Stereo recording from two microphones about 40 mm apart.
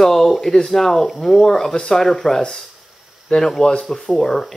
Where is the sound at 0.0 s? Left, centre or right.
Centre.